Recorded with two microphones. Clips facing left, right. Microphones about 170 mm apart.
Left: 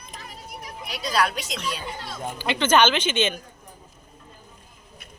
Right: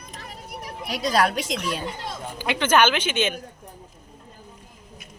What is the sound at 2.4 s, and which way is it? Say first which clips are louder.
Speech: even; 10° right (ahead or behind).